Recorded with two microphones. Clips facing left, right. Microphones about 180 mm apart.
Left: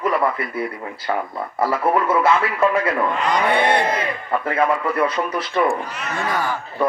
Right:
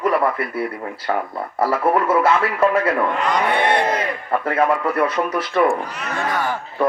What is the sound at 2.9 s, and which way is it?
Speech, centre (ahead or behind).